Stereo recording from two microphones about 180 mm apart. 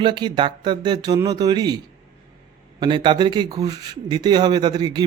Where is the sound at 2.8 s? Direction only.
25° right (ahead or behind).